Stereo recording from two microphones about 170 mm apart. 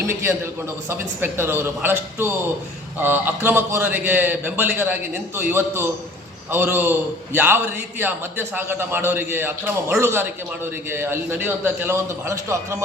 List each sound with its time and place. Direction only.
0.1 s a man's voice: 15° right (ahead or behind)